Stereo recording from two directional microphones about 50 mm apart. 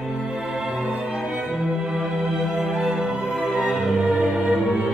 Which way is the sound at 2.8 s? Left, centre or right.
Centre.